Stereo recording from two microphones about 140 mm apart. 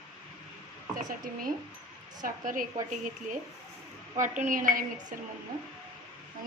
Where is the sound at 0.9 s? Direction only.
70° right (ahead or behind).